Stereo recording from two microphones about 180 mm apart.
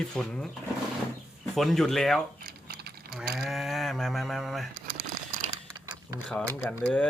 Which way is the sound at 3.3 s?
Centre (ahead or behind).